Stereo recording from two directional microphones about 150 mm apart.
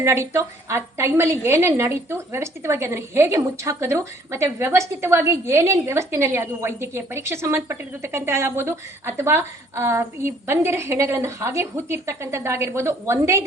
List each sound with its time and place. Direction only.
0.0 s a woman's voice: 15° right (ahead or behind)